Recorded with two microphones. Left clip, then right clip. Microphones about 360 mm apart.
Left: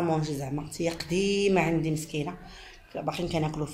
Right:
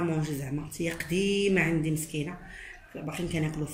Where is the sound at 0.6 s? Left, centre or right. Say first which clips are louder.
Left 2 dB; centre.